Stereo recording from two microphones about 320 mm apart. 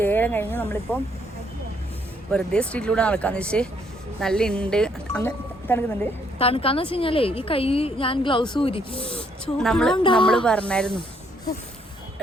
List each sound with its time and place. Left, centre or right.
0.0 s speech: centre
2.3 s speech: centre
6.4 s a woman's voice: centre
9.6 s speech: centre
10.0 s a woman's voice: centre
10.2 s speech: centre